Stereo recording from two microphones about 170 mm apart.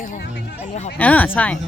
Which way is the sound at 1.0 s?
10° left (ahead or behind).